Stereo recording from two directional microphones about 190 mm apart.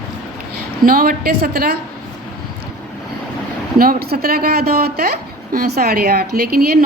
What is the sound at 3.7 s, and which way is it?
A woman's voice, 55° right (ahead or behind).